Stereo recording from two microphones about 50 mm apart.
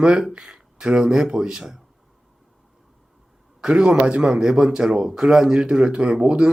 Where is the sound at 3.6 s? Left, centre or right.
Centre.